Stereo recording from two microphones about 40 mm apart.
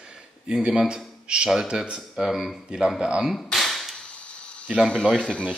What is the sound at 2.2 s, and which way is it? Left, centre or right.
Speech, centre.